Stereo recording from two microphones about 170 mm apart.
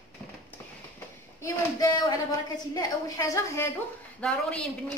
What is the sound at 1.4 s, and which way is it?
A woman's voice, 20° left (ahead or behind).